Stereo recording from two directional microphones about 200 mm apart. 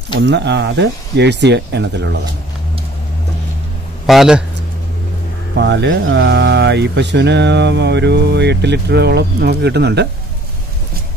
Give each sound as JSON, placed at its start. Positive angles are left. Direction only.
{"t": 0.2, "sound": "speech", "side_deg": -60}
{"t": 4.0, "sound": "a man's voice", "side_deg": 0}
{"t": 5.6, "sound": "speech", "side_deg": -60}